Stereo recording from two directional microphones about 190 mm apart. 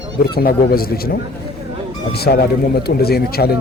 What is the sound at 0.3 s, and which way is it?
Speech, 50° left (ahead or behind).